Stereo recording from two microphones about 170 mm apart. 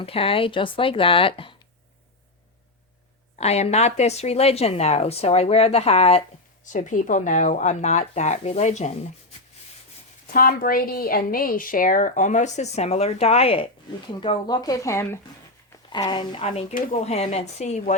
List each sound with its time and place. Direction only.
0.0 s speech: 35° left (ahead or behind)
3.3 s speech: 40° left (ahead or behind)
6.7 s a woman's voice: 50° left (ahead or behind)
10.3 s a woman's voice: 60° left (ahead or behind); by 16.6 s 30° left (ahead or behind)
16.7 s speech: 55° left (ahead or behind)
17.1 s speech: 40° left (ahead or behind)